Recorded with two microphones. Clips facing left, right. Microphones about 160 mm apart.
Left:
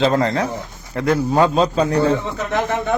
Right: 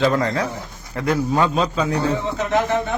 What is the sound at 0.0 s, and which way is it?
A man's voice, 30° left (ahead or behind).